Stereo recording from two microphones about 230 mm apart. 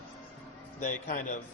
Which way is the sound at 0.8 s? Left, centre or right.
Left.